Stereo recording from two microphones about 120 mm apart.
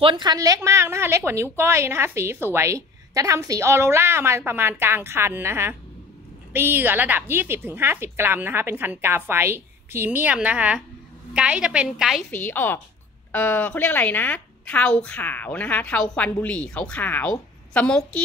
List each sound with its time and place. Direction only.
0.0 s a woman's voice: 40° right (ahead or behind)
0.6 s a woman's voice: 20° right (ahead or behind); by 12.2 s 5° right (ahead or behind)
12.3 s a woman's voice: 15° left (ahead or behind)